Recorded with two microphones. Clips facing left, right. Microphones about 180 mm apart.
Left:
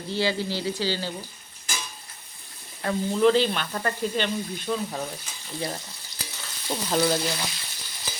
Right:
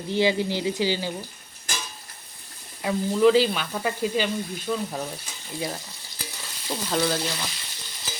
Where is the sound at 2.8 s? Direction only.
5° right (ahead or behind).